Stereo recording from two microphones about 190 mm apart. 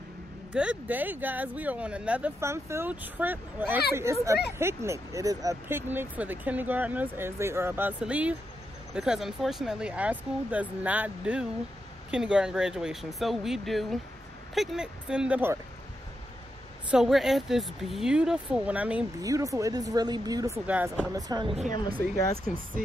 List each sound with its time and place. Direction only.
0.5 s speech: 5° right (ahead or behind)
16.9 s speech: centre (ahead or behind)
19.2 s speech: 15° right (ahead or behind)
21.1 s speech: 20° right (ahead or behind)